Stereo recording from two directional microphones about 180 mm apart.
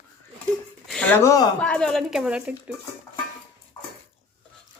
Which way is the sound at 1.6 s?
5° left (ahead or behind).